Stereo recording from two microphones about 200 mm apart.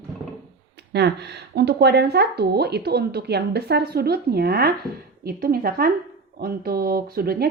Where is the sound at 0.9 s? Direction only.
55° right (ahead or behind).